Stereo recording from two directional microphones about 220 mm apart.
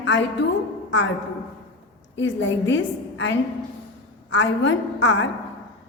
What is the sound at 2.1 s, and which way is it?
A woman's voice, 55° left (ahead or behind).